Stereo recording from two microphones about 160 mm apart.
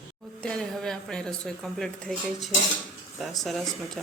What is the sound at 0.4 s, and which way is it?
Speech, 5° left (ahead or behind).